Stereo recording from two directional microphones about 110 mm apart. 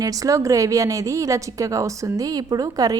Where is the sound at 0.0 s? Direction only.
30° right (ahead or behind).